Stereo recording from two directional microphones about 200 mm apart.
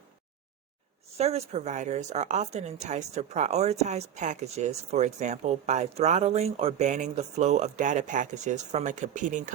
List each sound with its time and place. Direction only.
1.2 s speech: 30° right (ahead or behind)